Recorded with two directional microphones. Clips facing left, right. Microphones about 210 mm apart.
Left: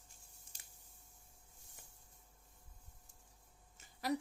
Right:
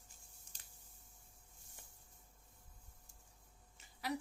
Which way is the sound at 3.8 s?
40° left (ahead or behind).